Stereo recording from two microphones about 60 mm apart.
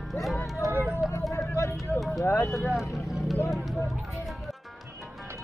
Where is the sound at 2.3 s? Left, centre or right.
Left.